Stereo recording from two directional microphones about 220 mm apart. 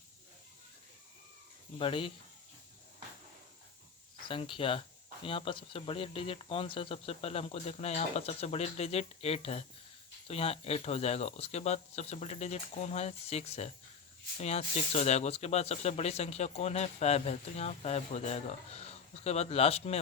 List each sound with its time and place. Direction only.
1.8 s speech: 25° left (ahead or behind)
4.3 s speech: 25° left (ahead or behind)